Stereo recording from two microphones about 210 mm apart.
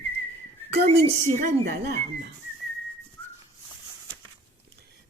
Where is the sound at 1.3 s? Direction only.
40° right (ahead or behind).